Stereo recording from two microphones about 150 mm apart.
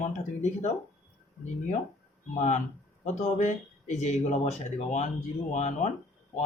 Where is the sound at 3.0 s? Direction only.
50° left (ahead or behind).